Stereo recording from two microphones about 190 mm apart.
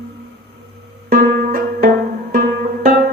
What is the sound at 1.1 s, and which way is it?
Music, 50° right (ahead or behind).